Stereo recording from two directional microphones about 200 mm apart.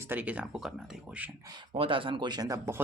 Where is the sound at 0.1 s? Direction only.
10° right (ahead or behind).